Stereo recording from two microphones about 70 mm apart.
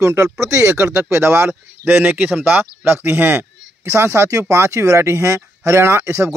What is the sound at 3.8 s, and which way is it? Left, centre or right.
Speech, right.